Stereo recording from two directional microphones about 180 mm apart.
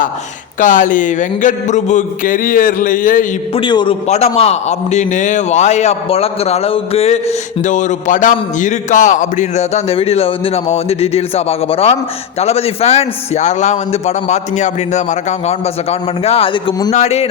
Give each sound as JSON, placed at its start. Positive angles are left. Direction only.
{"t": 0.6, "sound": "speech", "side_deg": 45}
{"t": 3.5, "sound": "a man's voice", "side_deg": 25}